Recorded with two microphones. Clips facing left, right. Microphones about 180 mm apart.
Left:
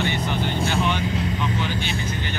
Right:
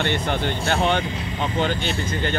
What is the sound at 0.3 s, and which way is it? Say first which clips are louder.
Speech: right 1 dB; 55° right (ahead or behind).